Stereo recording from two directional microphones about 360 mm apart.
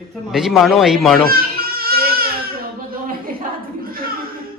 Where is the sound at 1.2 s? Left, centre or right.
Right.